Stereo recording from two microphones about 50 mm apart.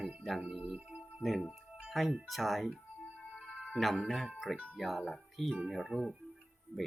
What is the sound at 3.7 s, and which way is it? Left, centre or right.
Speech, centre.